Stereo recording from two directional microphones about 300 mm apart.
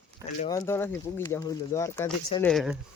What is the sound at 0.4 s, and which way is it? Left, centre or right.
Speech, centre.